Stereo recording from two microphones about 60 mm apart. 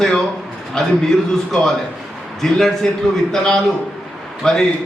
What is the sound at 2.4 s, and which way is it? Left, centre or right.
A man's voice, centre.